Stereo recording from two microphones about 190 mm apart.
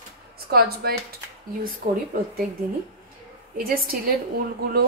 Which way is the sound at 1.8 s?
35° right (ahead or behind).